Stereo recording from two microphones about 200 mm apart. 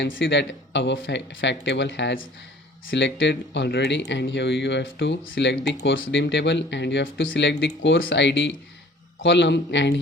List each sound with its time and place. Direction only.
0.0 s speech: 65° left (ahead or behind)